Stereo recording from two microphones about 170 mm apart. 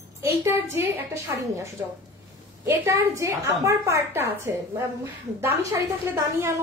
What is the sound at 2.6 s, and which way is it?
A woman's voice, 15° right (ahead or behind).